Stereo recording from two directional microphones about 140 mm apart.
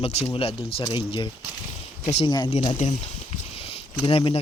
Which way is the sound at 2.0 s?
50° left (ahead or behind).